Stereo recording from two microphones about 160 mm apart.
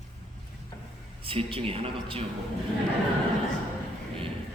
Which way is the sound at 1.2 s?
35° right (ahead or behind).